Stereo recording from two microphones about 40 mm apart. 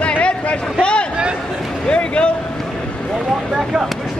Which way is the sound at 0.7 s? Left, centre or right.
Left.